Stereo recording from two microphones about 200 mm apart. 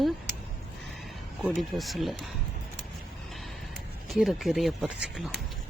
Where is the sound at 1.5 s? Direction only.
Centre (ahead or behind).